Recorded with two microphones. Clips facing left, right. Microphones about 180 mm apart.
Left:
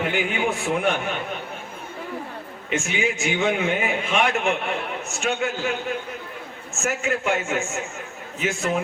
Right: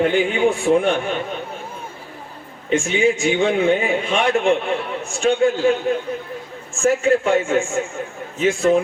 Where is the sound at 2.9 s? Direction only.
30° right (ahead or behind).